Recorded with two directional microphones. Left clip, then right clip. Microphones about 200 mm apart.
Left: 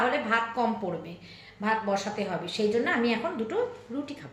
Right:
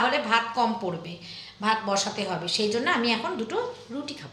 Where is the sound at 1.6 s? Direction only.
5° right (ahead or behind).